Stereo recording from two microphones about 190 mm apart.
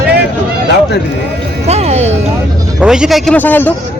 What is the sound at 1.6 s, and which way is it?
Music, 35° right (ahead or behind).